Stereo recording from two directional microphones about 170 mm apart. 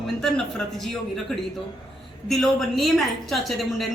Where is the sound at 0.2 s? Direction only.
5° left (ahead or behind).